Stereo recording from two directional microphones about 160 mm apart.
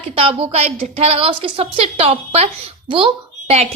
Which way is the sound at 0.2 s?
35° right (ahead or behind).